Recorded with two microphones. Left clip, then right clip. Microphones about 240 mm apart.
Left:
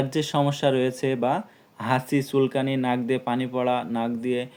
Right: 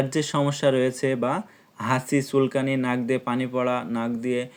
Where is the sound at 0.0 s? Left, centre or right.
Right.